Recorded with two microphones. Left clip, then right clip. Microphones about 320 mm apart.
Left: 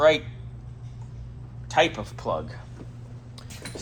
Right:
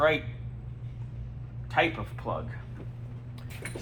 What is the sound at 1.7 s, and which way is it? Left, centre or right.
Speech, centre.